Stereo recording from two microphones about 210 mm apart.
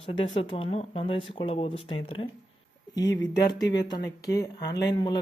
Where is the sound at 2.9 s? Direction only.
55° left (ahead or behind).